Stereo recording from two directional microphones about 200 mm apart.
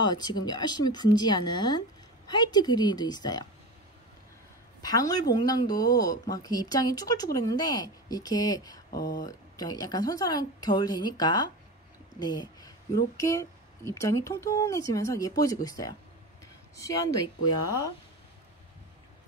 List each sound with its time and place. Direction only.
0.0 s a woman's voice: 20° left (ahead or behind)
4.8 s a woman's voice: 20° left (ahead or behind)
8.9 s speech: 45° left (ahead or behind)
9.2 s a woman's voice: 20° left (ahead or behind)